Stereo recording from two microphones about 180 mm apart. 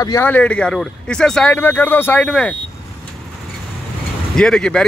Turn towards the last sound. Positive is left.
turn(degrees=5)  # may be behind; listen again after turning